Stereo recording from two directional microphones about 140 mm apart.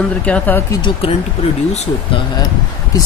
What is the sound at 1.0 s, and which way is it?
Speech, 45° left (ahead or behind).